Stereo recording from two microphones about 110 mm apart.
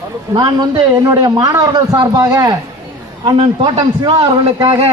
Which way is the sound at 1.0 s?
30° right (ahead or behind).